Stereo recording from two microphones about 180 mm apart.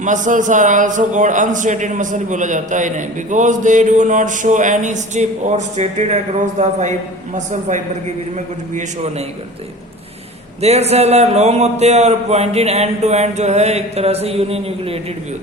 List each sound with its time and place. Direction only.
0.0 s a man's voice: 45° right (ahead or behind)
10.6 s speech: 35° right (ahead or behind)